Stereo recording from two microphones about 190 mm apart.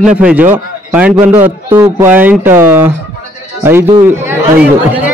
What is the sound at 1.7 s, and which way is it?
Speech, 15° right (ahead or behind).